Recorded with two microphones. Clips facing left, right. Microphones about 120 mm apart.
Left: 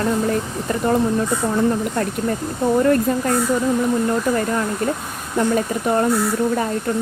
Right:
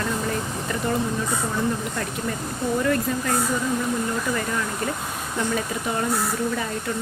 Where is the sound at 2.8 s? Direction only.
40° left (ahead or behind).